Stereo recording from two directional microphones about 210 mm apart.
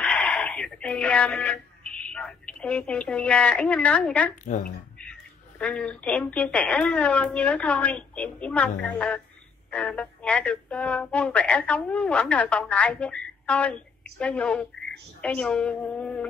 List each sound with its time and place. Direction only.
0.0 s a sound: 5° left (ahead or behind)
4.5 s speech: 35° left (ahead or behind)
5.6 s a woman's voice: 5° left (ahead or behind)